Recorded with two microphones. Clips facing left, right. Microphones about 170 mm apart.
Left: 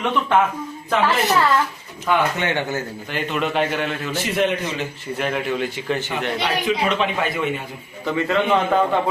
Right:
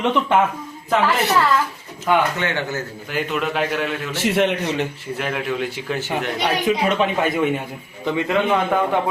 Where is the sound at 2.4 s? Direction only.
15° left (ahead or behind).